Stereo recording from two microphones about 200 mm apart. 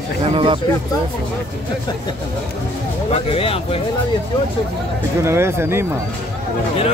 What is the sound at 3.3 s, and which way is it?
Speech, 30° left (ahead or behind).